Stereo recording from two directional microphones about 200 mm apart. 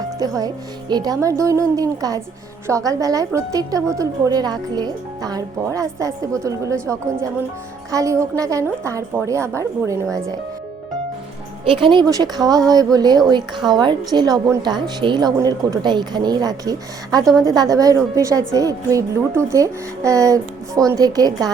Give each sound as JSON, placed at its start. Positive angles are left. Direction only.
{"t": 0.2, "sound": "a woman's voice", "side_deg": -20}
{"t": 11.8, "sound": "a woman's voice", "side_deg": -25}